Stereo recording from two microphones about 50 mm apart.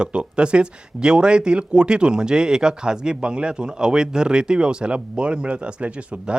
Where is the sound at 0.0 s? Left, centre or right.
Right.